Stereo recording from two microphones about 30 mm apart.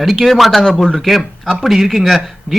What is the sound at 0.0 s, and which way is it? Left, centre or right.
Speech, centre.